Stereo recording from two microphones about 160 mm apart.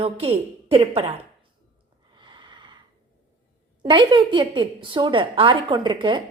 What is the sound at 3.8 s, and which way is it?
A woman's voice, 30° right (ahead or behind).